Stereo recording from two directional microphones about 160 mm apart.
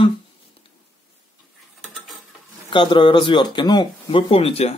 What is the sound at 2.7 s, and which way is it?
Speech, 30° left (ahead or behind).